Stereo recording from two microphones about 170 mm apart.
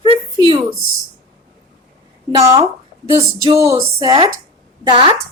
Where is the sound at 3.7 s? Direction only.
20° right (ahead or behind).